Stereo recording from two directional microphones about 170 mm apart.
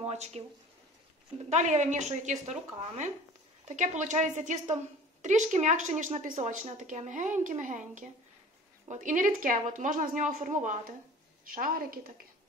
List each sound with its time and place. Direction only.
0.0 s speech: 40° right (ahead or behind)
1.5 s a woman's voice: 45° right (ahead or behind)